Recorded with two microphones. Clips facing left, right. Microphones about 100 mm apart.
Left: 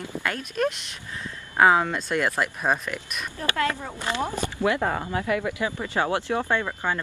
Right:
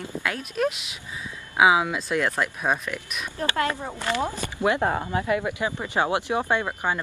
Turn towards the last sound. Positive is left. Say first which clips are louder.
# right 1 dB
turn(degrees=-20)  # may be behind; listen again after turning